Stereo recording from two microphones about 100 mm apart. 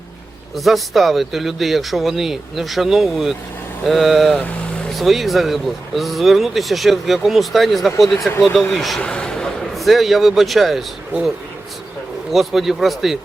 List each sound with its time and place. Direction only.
0.5 s a man's voice: centre (ahead or behind)
12.3 s speech: centre (ahead or behind)